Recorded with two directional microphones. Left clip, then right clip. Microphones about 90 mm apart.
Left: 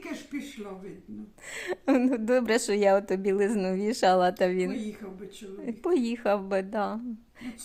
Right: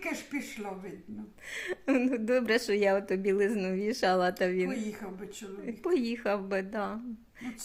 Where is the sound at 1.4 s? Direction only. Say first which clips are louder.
Left 2 dB; 25° left (ahead or behind).